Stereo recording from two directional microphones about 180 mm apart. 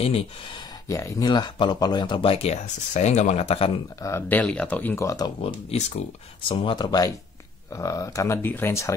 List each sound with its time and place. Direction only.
0.0 s speech: 30° left (ahead or behind)
4.0 s speech: 10° left (ahead or behind)
5.4 s speech: 35° left (ahead or behind); by 8.9 s 15° left (ahead or behind)